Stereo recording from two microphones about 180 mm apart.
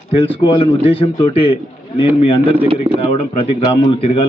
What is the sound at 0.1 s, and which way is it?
A man's voice, 30° left (ahead or behind).